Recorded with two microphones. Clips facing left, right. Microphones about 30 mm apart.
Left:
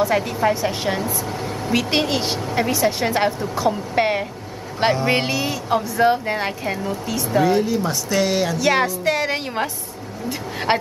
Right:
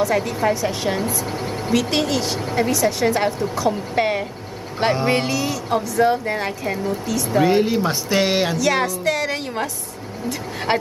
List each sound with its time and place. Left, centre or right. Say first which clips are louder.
0.1 s a woman's voice: even; centre
7.4 s speech: right 3 dB; right
8.5 s a woman's voice: left 1 dB; centre
10.7 s a woman's voice: left 1 dB; centre